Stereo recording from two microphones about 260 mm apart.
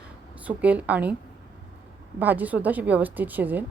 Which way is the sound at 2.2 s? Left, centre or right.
Centre.